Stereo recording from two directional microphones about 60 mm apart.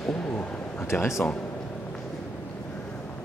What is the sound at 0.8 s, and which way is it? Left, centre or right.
Speech, left.